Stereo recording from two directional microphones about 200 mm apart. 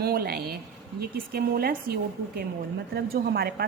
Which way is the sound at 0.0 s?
50° right (ahead or behind).